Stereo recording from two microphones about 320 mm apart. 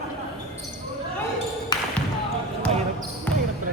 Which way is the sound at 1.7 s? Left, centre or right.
Centre.